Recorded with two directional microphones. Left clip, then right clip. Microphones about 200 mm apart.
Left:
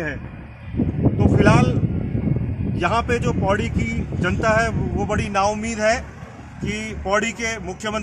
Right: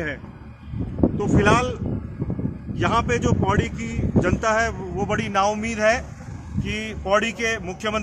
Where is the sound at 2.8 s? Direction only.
50° left (ahead or behind).